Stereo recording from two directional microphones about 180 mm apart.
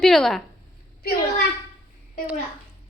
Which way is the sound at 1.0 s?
60° left (ahead or behind).